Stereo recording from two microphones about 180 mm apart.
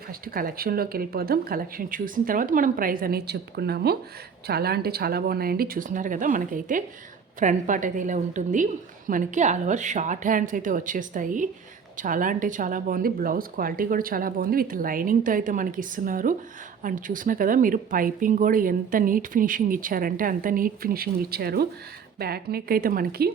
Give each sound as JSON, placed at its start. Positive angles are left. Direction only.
{"t": 0.1, "sound": "speech", "side_deg": -50}